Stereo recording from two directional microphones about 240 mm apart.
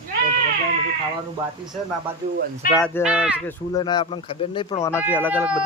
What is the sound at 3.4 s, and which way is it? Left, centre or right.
Speech, centre.